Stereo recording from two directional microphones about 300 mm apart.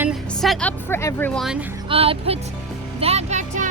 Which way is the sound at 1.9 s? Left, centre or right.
Centre.